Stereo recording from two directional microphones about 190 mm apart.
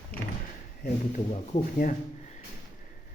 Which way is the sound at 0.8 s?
45° left (ahead or behind).